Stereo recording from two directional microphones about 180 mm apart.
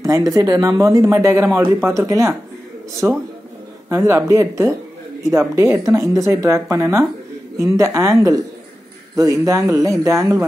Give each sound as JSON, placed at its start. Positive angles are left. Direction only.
{"t": 0.0, "sound": "speech", "side_deg": -20}